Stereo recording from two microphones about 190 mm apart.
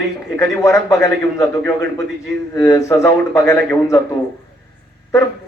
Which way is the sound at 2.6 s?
15° left (ahead or behind).